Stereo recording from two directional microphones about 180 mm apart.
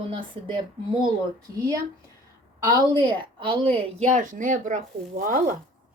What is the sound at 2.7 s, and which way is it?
A woman's voice, 25° right (ahead or behind).